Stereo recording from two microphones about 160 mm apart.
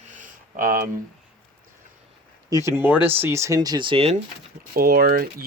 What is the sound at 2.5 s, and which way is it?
Speech, 15° right (ahead or behind).